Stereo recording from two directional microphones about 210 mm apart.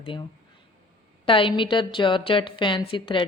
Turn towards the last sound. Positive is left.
turn(degrees=25)  # may be behind; listen again after turning